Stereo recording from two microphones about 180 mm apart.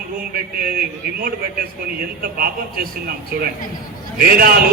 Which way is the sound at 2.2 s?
55° right (ahead or behind).